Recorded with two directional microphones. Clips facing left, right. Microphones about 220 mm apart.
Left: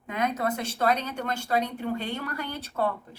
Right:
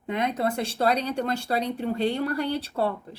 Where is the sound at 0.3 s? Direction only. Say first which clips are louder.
Right 3 dB; 30° right (ahead or behind).